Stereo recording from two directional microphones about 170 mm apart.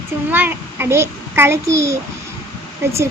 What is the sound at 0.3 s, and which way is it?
Speech, 10° right (ahead or behind).